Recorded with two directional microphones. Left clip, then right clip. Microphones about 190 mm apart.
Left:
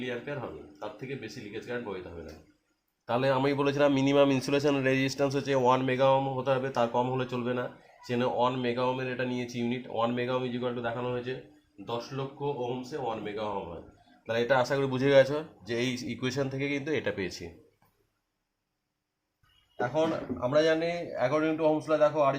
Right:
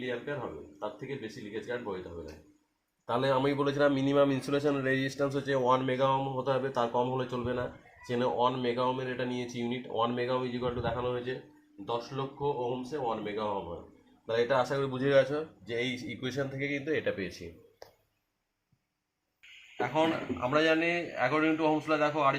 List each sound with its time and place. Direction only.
3.1 s a man's voice: 30° left (ahead or behind)
14.3 s a man's voice: 45° left (ahead or behind)
19.8 s a man's voice: 40° left (ahead or behind)